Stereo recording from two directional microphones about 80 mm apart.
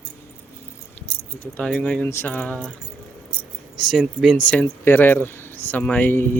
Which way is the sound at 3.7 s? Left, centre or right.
Centre.